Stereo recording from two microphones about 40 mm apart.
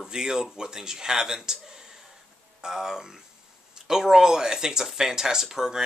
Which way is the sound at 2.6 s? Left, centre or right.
Centre.